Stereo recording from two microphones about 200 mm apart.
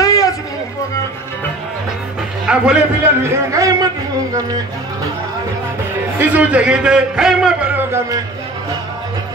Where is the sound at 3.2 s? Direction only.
15° right (ahead or behind).